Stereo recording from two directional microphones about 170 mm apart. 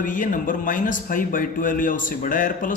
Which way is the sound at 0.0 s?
50° left (ahead or behind).